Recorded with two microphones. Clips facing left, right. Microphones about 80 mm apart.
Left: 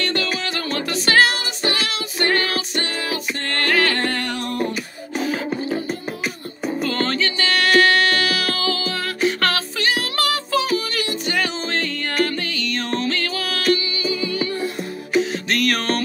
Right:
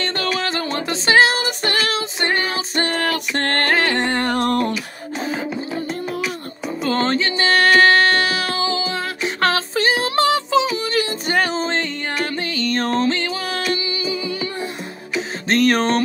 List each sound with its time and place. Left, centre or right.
0.5 s music: right
1.3 s child singing: right
2.0 s music: right
2.7 s music: right
3.7 s music: right
4.2 s music: right
4.5 s music: right
5.2 s music: right
6.8 s music: right
15.4 s music: right